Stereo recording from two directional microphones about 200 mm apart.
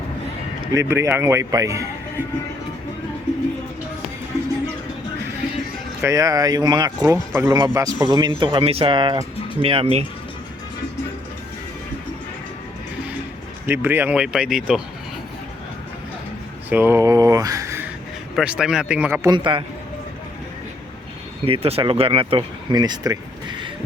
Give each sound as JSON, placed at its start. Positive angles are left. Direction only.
{"t": 0.7, "sound": "speech", "side_deg": -15}
{"t": 6.0, "sound": "speech", "side_deg": -15}
{"t": 13.7, "sound": "speech", "side_deg": -10}
{"t": 16.6, "sound": "speech", "side_deg": -10}
{"t": 18.3, "sound": "speech", "side_deg": -5}
{"t": 19.3, "sound": "speech", "side_deg": -25}
{"t": 21.4, "sound": "speech", "side_deg": -30}